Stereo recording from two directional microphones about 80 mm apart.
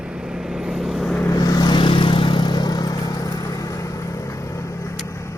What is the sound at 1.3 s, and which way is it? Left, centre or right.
Vehicle, left.